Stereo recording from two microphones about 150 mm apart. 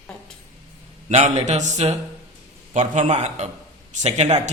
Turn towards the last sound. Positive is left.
turn(degrees=-50)  # may be behind; listen again after turning